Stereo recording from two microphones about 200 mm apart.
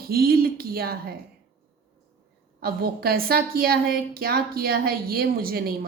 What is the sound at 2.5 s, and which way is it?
A woman's voice, 50° right (ahead or behind).